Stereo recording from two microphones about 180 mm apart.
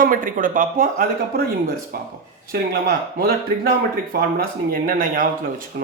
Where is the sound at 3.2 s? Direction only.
55° right (ahead or behind).